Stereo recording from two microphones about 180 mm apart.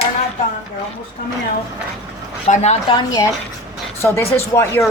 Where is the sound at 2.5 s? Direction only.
40° left (ahead or behind).